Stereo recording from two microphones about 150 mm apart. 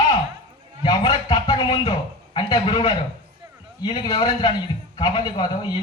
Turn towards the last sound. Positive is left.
turn(degrees=30)  # may be behind; listen again after turning